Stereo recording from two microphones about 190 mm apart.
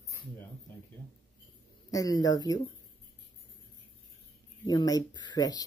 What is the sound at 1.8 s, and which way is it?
Speech, 20° left (ahead or behind).